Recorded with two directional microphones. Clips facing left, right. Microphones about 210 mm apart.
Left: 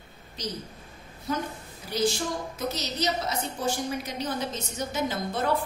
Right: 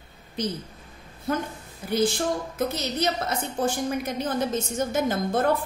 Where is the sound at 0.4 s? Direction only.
55° right (ahead or behind).